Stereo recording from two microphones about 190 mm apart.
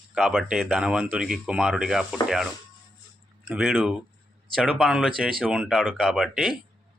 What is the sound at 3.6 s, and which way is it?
Speech, centre (ahead or behind).